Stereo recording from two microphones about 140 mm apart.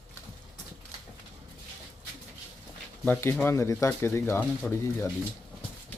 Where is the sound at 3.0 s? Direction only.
15° left (ahead or behind).